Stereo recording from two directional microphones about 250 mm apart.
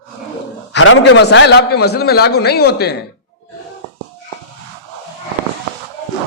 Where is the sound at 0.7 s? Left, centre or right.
Left.